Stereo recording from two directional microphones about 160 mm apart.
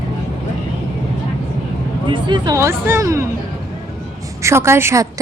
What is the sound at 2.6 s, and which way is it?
Speech, 15° right (ahead or behind).